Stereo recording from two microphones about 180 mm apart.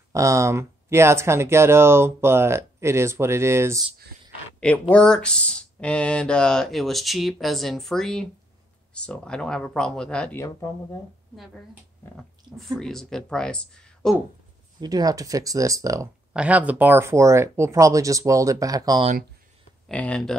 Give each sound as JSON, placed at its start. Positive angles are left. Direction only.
{"t": 0.1, "sound": "speech", "side_deg": -20}
{"t": 4.6, "sound": "speech", "side_deg": 5}
{"t": 12.7, "sound": "speech", "side_deg": 0}
{"t": 14.8, "sound": "speech", "side_deg": -20}
{"t": 16.3, "sound": "speech", "side_deg": -10}
{"t": 19.9, "sound": "speech", "side_deg": 5}